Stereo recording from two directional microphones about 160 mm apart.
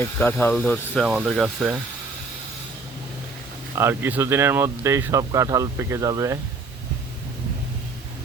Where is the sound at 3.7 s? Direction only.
15° right (ahead or behind).